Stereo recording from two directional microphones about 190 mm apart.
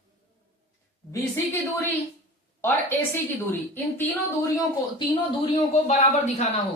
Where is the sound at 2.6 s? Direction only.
10° left (ahead or behind).